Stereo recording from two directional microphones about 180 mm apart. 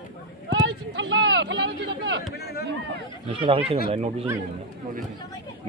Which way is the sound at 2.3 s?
60° left (ahead or behind).